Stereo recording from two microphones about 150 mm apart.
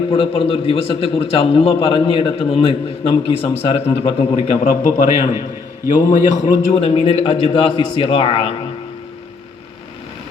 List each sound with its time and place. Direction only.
0.1 s a man's voice: 35° left (ahead or behind)
4.7 s a man's voice: 55° left (ahead or behind)
6.7 s a man's voice: 40° left (ahead or behind)